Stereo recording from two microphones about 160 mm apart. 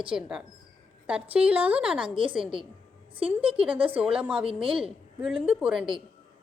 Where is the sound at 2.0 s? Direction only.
30° right (ahead or behind).